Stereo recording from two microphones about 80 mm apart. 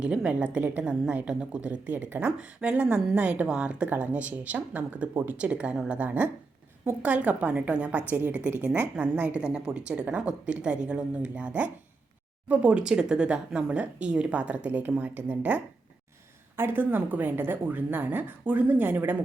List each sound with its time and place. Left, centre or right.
0.0 s a woman's voice: centre